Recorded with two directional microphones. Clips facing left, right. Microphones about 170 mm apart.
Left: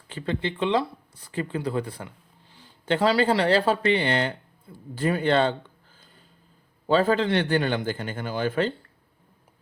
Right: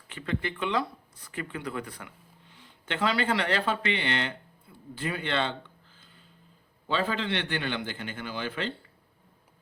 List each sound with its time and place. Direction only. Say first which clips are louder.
0.1 s speech: left 4 dB; 30° left (ahead or behind)
6.8 s a man's voice: left 8 dB; 45° left (ahead or behind)